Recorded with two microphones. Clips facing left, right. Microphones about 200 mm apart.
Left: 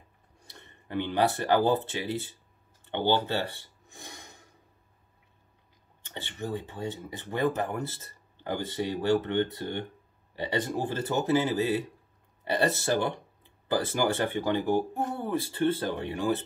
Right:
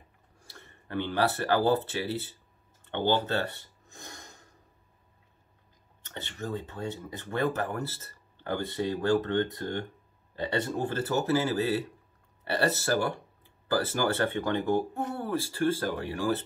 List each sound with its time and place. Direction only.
0.5 s speech: 20° left (ahead or behind)
4.0 s snort: 15° left (ahead or behind)
6.3 s speech: 20° left (ahead or behind)
10.3 s speech: 15° left (ahead or behind)